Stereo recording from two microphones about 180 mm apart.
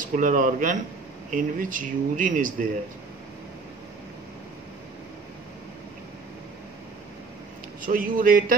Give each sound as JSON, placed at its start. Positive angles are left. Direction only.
{"t": 0.1, "sound": "speech", "side_deg": -45}
{"t": 7.8, "sound": "speech", "side_deg": -50}